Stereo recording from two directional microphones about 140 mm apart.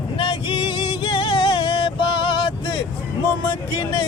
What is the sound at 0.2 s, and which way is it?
Music, 40° left (ahead or behind).